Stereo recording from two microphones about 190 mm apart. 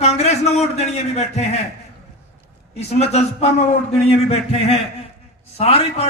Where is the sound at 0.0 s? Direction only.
35° left (ahead or behind).